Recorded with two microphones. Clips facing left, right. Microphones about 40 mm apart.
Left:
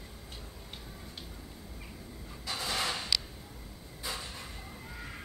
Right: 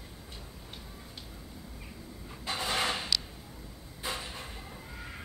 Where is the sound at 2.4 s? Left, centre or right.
Right.